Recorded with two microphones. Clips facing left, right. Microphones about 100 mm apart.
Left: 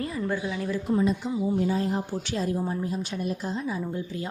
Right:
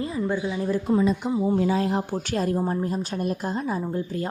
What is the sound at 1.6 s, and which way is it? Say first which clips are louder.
Speech: right 3 dB; 90° right.